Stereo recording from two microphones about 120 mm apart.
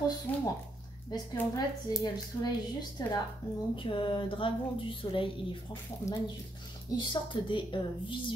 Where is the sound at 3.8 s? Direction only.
45° left (ahead or behind).